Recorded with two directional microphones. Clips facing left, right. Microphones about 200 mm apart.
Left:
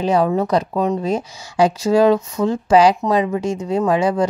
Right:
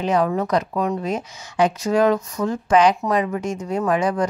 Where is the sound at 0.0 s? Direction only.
30° left (ahead or behind).